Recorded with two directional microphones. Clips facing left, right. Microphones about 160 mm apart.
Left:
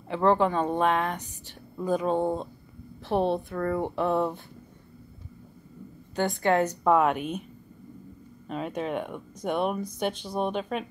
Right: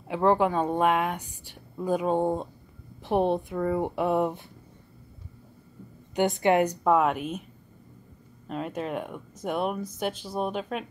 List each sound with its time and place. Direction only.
0.1 s a woman's voice: 10° right (ahead or behind)
6.1 s a woman's voice: 20° right (ahead or behind)
6.8 s speech: centre (ahead or behind)
8.5 s speech: centre (ahead or behind)